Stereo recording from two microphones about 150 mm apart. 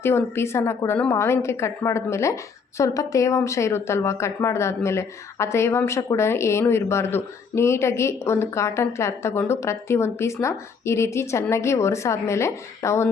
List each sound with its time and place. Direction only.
0.0 s a woman's voice: 15° left (ahead or behind)